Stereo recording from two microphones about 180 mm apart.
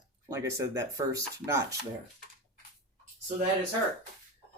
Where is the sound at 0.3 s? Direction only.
15° right (ahead or behind).